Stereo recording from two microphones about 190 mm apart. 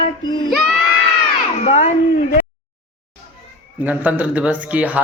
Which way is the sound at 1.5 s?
35° left (ahead or behind).